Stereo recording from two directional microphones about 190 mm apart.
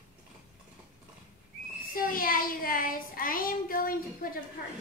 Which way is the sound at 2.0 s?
50° left (ahead or behind).